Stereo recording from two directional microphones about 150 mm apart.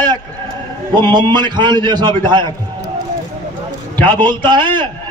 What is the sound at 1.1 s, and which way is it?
A man's voice, 30° right (ahead or behind).